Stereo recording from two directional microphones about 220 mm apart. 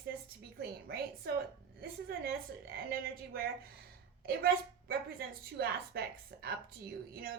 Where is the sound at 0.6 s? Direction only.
45° right (ahead or behind).